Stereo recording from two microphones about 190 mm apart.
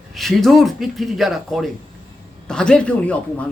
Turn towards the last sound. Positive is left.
turn(degrees=5)  # may be behind; listen again after turning